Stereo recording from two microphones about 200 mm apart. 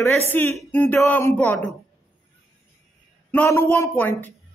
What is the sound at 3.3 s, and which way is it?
A man's voice, 10° left (ahead or behind).